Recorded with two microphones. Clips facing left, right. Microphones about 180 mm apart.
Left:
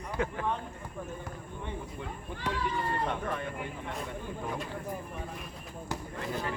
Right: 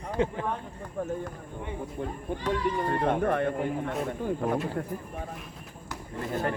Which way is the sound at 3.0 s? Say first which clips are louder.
Right 9 dB; 55° right (ahead or behind).